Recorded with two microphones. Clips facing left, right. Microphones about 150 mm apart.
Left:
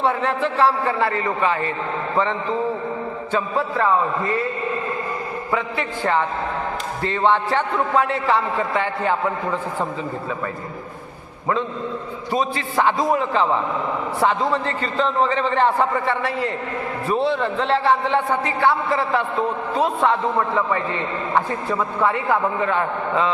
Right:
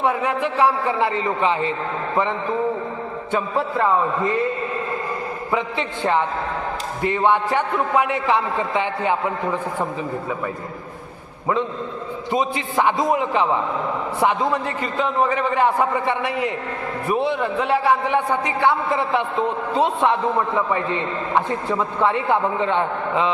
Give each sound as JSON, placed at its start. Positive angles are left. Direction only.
{"t": 0.0, "sound": "a man's voice", "side_deg": -10}
{"t": 3.3, "sound": "a man's voice", "side_deg": -15}
{"t": 5.5, "sound": "a man's voice", "side_deg": -20}
{"t": 12.3, "sound": "a man's voice", "side_deg": -20}